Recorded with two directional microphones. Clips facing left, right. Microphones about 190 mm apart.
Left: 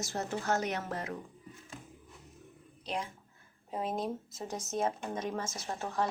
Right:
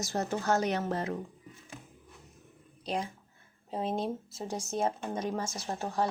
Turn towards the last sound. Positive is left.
turn(degrees=-35)  # may be behind; listen again after turning